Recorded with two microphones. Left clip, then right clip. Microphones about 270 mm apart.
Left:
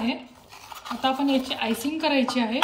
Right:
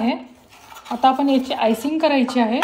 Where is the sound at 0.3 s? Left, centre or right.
Right.